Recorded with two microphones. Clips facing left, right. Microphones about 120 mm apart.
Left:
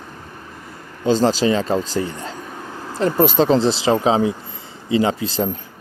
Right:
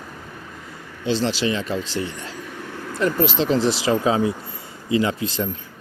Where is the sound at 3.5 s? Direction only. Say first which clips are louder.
Left 3 dB; 30° left (ahead or behind).